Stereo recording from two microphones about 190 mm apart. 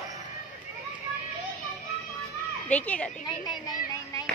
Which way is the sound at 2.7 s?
5° left (ahead or behind).